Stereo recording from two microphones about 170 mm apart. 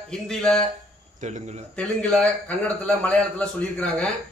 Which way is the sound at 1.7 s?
5° left (ahead or behind).